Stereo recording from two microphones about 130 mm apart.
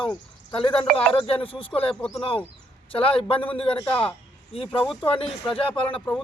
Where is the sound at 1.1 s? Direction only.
45° left (ahead or behind).